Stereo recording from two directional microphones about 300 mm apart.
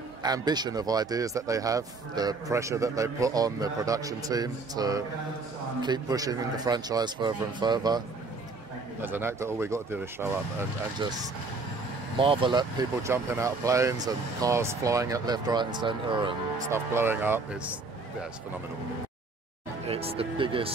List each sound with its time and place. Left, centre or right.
0.2 s speech: centre
9.0 s speech: centre
19.9 s speech: centre